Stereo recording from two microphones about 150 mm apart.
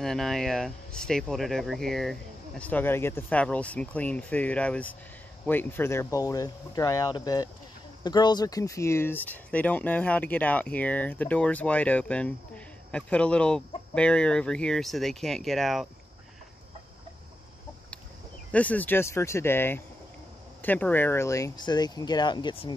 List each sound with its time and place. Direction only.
0.0 s speech: 5° left (ahead or behind)
2.6 s speech: 10° left (ahead or behind)
18.5 s speech: 10° left (ahead or behind); by 22.8 s 30° left (ahead or behind)